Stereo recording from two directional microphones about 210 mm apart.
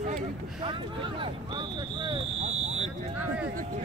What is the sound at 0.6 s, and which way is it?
Speech, 25° right (ahead or behind).